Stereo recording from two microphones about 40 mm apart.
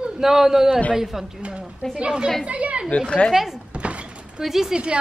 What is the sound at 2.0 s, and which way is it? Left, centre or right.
Speech, right.